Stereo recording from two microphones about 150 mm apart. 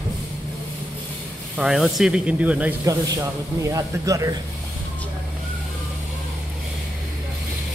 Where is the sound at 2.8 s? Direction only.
20° right (ahead or behind).